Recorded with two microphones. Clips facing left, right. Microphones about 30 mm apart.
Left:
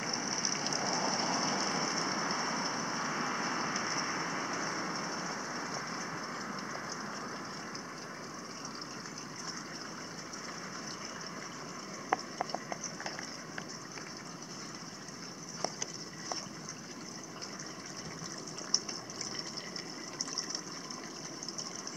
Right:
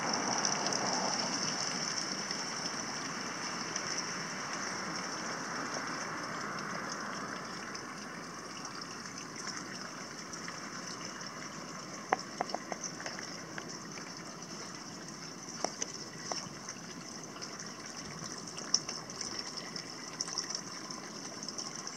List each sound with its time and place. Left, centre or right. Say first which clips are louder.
0.0 s rain: right 2 dB; centre
1.5 s vehicle: left 4 dB; centre
6.2 s train: right 1 dB; centre
7.0 s a sound: right 1 dB; centre